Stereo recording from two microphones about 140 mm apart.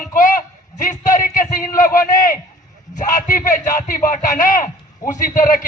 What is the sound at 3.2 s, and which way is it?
A man's voice, 65° left (ahead or behind).